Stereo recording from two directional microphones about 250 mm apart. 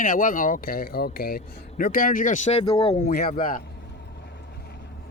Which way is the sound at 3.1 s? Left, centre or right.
Left.